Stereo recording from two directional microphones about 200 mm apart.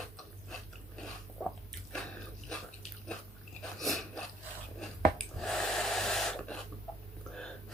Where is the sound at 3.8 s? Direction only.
Centre (ahead or behind).